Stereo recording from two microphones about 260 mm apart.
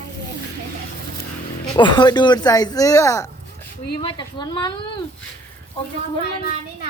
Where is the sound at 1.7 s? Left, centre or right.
Centre.